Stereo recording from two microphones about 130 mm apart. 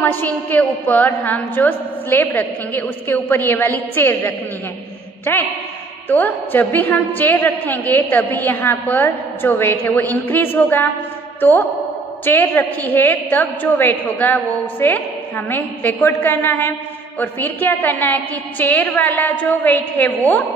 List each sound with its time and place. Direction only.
0.0 s a woman's voice: 15° left (ahead or behind)